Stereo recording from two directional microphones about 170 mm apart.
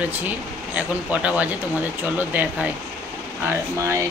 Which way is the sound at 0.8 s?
10° right (ahead or behind).